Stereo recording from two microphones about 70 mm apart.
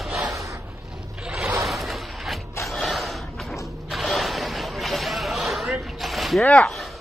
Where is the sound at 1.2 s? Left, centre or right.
Centre.